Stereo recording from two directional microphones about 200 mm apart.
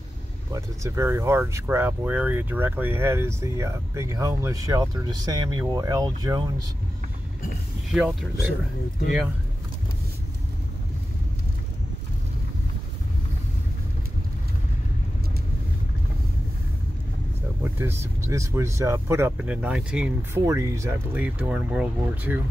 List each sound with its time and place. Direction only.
0.5 s speech: 15° right (ahead or behind)
7.9 s speech: 5° right (ahead or behind)
17.7 s speech: 10° right (ahead or behind)
20.4 s speech: 15° right (ahead or behind)